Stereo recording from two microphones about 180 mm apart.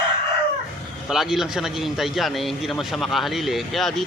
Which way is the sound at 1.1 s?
Centre (ahead or behind).